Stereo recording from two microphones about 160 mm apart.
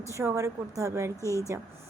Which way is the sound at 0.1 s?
20° right (ahead or behind).